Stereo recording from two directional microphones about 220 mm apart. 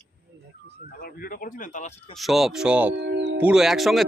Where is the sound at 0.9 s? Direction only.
40° left (ahead or behind).